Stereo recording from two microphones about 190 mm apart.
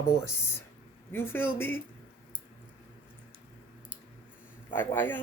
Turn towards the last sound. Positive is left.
turn(degrees=10)  # may be behind; listen again after turning